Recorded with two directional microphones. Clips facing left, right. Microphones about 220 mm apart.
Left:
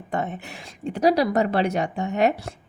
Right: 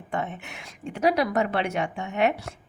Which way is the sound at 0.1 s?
40° left (ahead or behind).